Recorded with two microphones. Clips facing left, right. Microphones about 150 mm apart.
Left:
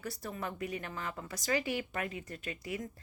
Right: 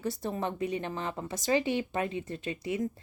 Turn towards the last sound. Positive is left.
turn(degrees=-25)  # may be behind; listen again after turning